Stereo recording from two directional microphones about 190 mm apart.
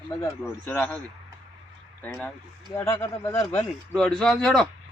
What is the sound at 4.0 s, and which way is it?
Speech, 5° left (ahead or behind).